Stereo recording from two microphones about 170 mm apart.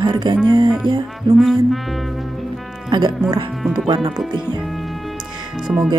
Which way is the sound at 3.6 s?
Centre (ahead or behind).